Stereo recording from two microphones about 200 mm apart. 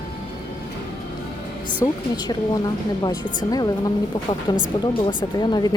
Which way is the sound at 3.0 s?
20° left (ahead or behind).